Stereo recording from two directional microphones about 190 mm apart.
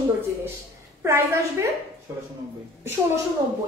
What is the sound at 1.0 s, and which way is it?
Speech, 15° right (ahead or behind).